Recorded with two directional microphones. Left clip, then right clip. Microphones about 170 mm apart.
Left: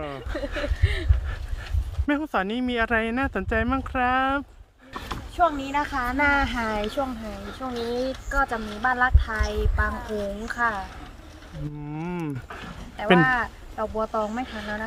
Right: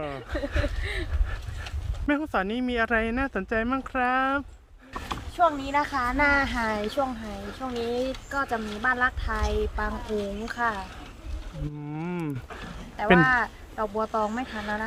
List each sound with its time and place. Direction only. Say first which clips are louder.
0.0 s speech: even; centre (ahead or behind)
5.4 s speech: even; 10° right (ahead or behind)
10.1 s speech: left 1 dB; 40° right (ahead or behind)
10.5 s speech: left 3 dB; 20° right (ahead or behind)
11.9 s speech: left 1 dB; centre (ahead or behind)
13.1 s speech: even; 20° right (ahead or behind)
14.5 s speech: right 1 dB; centre (ahead or behind)